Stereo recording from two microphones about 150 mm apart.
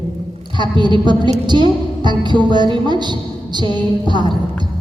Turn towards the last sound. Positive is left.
turn(degrees=-30)  # may be behind; listen again after turning